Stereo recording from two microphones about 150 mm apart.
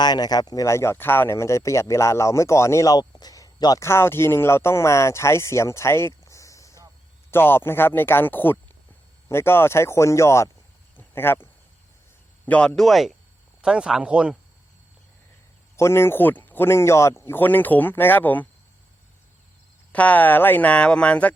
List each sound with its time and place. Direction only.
0.0 s speech: 25° left (ahead or behind)
10.9 s a sound: 15° left (ahead or behind)
12.5 s speech: 5° left (ahead or behind)
15.7 s speech: 15° left (ahead or behind)
19.9 s speech: 10° left (ahead or behind)